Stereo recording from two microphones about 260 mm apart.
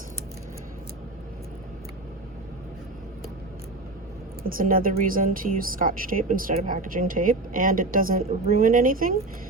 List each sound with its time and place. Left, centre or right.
4.4 s speech: right